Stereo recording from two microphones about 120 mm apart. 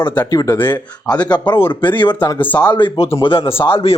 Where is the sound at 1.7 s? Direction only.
40° left (ahead or behind).